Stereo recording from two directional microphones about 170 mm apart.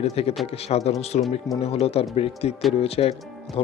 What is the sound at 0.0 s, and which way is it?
Speech, 35° left (ahead or behind).